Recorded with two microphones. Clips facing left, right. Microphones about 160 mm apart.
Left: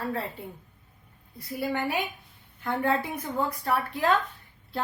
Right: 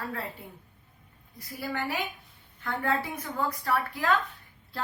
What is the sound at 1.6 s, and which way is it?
A woman's voice, 25° left (ahead or behind).